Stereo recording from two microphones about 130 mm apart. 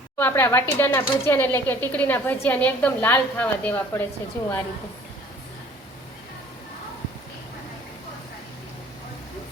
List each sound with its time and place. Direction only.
0.2 s speech: 15° left (ahead or behind)